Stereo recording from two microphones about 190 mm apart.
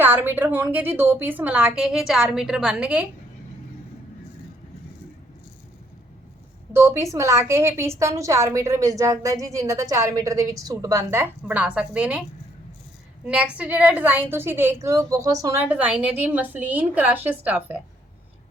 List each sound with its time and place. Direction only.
0.0 s a woman's voice: 10° right (ahead or behind)
6.7 s a woman's voice: 15° right (ahead or behind)
13.2 s a woman's voice: 5° right (ahead or behind)